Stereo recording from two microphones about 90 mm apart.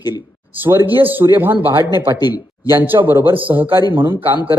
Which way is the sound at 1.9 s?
50° left (ahead or behind).